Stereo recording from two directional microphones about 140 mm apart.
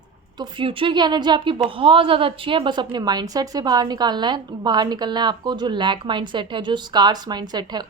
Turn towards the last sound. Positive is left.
turn(degrees=-30)  # may be behind; listen again after turning